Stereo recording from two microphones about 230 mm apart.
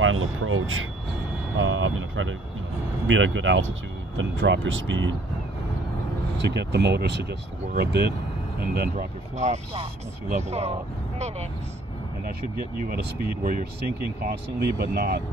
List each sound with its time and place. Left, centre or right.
0.0 s a sound: right
1.6 s speech: right
6.3 s speech: right
12.3 s speech: right